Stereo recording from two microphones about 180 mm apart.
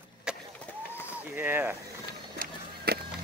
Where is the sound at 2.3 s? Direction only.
60° right (ahead or behind).